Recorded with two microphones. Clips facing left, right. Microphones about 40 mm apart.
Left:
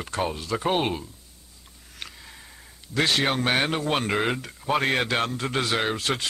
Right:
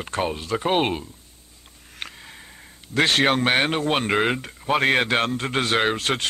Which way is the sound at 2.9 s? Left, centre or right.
Right.